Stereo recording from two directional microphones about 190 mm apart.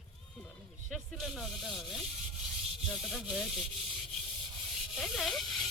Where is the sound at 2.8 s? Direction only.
Centre (ahead or behind).